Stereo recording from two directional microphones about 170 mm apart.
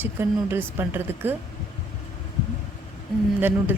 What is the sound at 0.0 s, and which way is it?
Speech, 15° right (ahead or behind).